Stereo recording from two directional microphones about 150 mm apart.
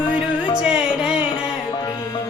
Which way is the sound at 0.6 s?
5° right (ahead or behind).